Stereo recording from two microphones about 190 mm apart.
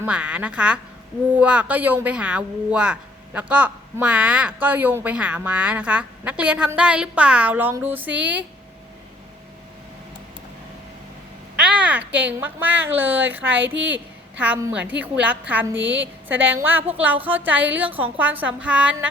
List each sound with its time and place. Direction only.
0.0 s speech: 5° right (ahead or behind)
11.6 s a child's voice: 5° right (ahead or behind)
13.7 s a woman's voice: 75° right (ahead or behind)
14.3 s speech: 10° right (ahead or behind)
15.8 s a woman's voice: 75° right (ahead or behind)
16.6 s speech: 10° right (ahead or behind)